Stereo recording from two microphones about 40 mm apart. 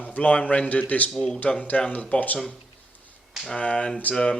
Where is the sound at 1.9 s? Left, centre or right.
Left.